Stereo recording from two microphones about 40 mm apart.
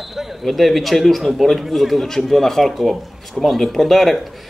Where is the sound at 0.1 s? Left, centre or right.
Centre.